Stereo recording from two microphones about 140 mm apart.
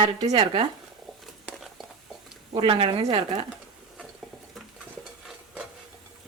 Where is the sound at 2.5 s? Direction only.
40° right (ahead or behind).